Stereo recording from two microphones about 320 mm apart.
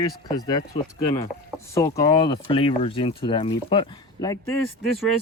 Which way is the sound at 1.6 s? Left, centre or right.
Centre.